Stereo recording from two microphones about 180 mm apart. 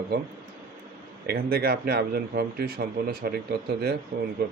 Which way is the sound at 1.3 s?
55° right (ahead or behind).